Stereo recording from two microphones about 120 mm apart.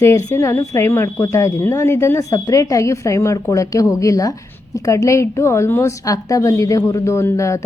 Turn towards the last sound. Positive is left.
turn(degrees=25)  # may be behind; listen again after turning